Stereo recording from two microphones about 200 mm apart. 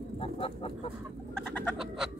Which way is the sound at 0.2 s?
30° left (ahead or behind).